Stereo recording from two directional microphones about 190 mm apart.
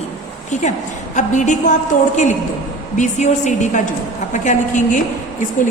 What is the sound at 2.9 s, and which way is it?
A woman's voice, 40° left (ahead or behind).